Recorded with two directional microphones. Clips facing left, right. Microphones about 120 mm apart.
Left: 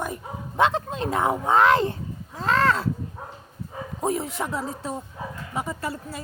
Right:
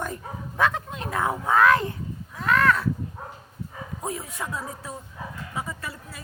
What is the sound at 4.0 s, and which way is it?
Speech, 25° left (ahead or behind).